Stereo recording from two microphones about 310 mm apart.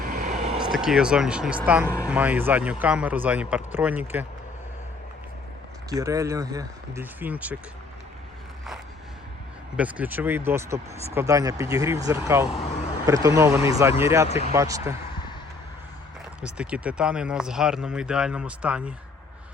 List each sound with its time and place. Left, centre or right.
0.0 s a sound: right
0.6 s speech: centre
5.9 s speech: centre
9.7 s speech: centre
14.3 s speech: centre
14.5 s speech: centre
16.6 s speech: centre